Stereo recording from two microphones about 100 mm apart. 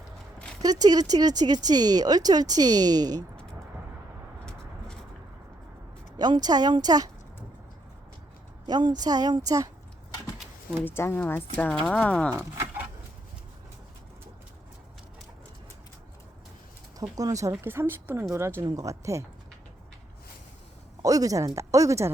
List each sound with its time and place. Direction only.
0.6 s speech: 40° right (ahead or behind)
4.4 s a sound: 10° left (ahead or behind)
6.1 s a woman's voice: 45° right (ahead or behind)
8.6 s speech: 45° right (ahead or behind)
10.8 s a woman's voice: 25° left (ahead or behind)
12.4 s a sound: 20° right (ahead or behind)
17.0 s speech: 40° right (ahead or behind)
21.0 s speech: 35° right (ahead or behind)